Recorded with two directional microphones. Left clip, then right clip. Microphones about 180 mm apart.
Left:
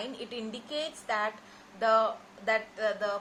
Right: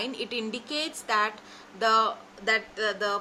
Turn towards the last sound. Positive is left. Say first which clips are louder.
# right 3 dB
turn(degrees=-50)  # may be behind; listen again after turning